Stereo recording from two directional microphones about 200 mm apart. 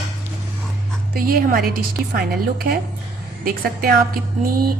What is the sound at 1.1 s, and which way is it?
A woman's voice, 45° right (ahead or behind).